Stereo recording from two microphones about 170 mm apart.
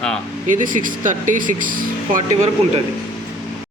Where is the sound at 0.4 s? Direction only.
50° right (ahead or behind).